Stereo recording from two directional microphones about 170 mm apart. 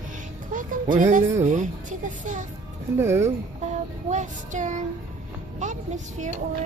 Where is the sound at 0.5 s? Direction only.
50° right (ahead or behind).